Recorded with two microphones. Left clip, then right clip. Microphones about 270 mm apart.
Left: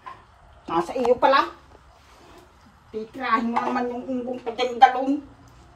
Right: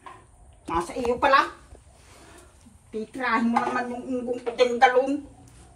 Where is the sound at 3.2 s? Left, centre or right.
Left.